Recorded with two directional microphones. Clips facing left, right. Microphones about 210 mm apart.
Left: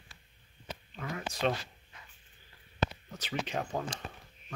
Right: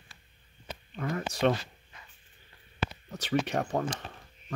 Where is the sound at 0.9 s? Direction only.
45° right (ahead or behind).